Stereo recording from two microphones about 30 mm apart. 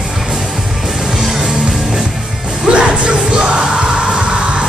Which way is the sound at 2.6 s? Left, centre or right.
Right.